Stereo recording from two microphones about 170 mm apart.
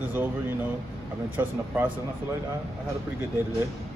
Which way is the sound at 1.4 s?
10° right (ahead or behind).